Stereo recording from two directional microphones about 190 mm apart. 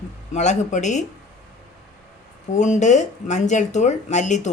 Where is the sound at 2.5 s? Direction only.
40° left (ahead or behind).